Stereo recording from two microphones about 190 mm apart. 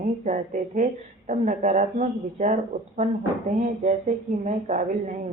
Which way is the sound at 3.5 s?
40° right (ahead or behind).